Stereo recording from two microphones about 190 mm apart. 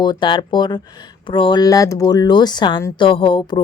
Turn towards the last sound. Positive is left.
turn(degrees=25)  # may be behind; listen again after turning